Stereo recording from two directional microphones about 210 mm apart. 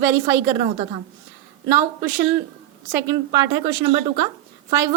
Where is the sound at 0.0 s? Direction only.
15° right (ahead or behind).